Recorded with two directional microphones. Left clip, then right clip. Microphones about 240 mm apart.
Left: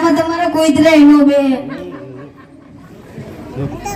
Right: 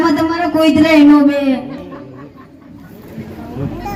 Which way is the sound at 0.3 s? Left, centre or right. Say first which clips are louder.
Left 1 dB; left.